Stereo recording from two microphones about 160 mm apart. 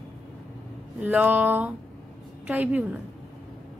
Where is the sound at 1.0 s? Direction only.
10° right (ahead or behind).